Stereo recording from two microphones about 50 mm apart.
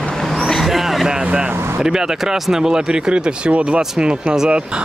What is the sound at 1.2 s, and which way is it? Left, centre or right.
Vehicle, right.